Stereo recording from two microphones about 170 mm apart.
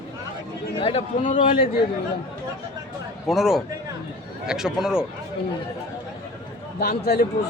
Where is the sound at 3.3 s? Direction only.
Centre (ahead or behind).